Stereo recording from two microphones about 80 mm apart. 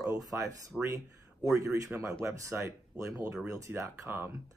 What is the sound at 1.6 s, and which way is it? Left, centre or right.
Speech, right.